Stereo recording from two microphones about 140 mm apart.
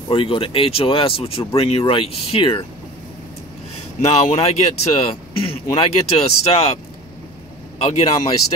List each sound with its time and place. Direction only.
0.1 s speech: 40° left (ahead or behind)
4.0 s speech: 50° left (ahead or behind)
7.8 s speech: 45° left (ahead or behind)